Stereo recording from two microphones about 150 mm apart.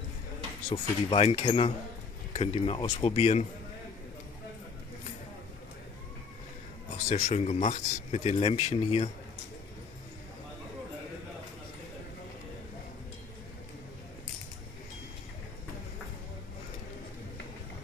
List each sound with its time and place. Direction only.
0.7 s speech: 40° left (ahead or behind)
7.1 s speech: 50° left (ahead or behind)